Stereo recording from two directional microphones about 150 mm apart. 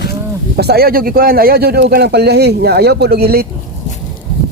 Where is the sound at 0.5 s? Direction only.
90° right.